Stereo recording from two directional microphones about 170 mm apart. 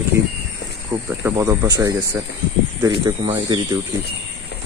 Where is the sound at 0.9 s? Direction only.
15° right (ahead or behind).